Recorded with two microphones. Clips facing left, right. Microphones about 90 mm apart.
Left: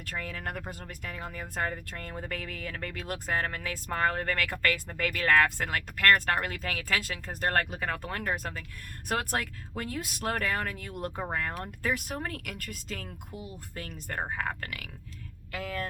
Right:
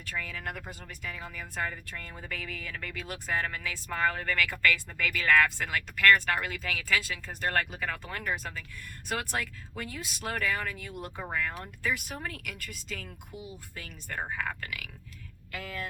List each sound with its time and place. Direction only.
0.0 s speech: 45° left (ahead or behind)
1.9 s speech: 55° left (ahead or behind)
14.2 s speech: 35° left (ahead or behind)
14.6 s speech: 50° left (ahead or behind)